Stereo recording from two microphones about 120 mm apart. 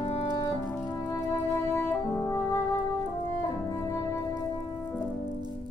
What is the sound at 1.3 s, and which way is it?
Music, 25° left (ahead or behind).